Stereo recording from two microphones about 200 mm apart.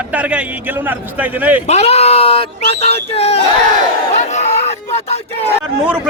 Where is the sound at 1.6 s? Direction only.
30° left (ahead or behind).